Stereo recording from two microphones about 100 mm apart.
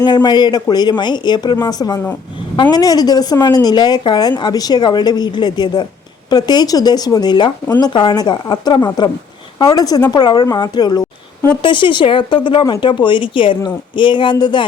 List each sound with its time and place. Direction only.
0.0 s a woman's voice: 45° left (ahead or behind)